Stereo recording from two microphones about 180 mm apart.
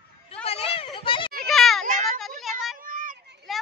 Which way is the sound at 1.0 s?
30° left (ahead or behind).